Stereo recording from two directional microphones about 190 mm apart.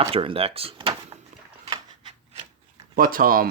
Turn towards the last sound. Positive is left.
turn(degrees=-50)  # may be behind; listen again after turning